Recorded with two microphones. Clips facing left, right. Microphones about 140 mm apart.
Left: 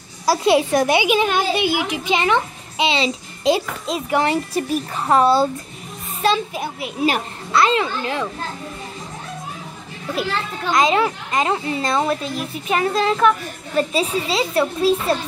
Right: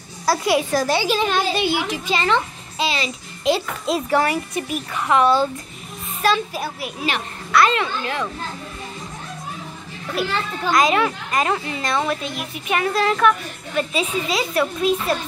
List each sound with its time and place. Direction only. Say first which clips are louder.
0.4 s a child's voice: left 5 dB; 25° left (ahead or behind)
4.6 s a child's voice: left 3 dB; 35° left (ahead or behind)
6.2 s a woman's voice: left 1 dB; 20° left (ahead or behind)
10.7 s a woman's voice: left 1 dB; 25° left (ahead or behind)